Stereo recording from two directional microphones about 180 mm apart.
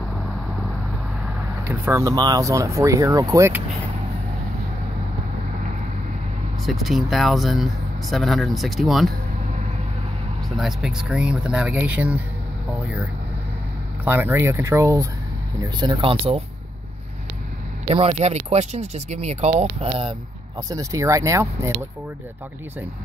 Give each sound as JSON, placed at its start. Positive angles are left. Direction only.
{"t": 1.7, "sound": "speech", "side_deg": -15}
{"t": 6.6, "sound": "speech", "side_deg": 0}
{"t": 10.6, "sound": "speech", "side_deg": -5}
{"t": 14.0, "sound": "speech", "side_deg": -10}
{"t": 15.8, "sound": "speech", "side_deg": -25}
{"t": 17.8, "sound": "speech", "side_deg": -30}
{"t": 20.7, "sound": "speech", "side_deg": -15}